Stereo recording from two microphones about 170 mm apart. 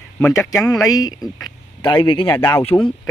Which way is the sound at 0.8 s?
20° left (ahead or behind).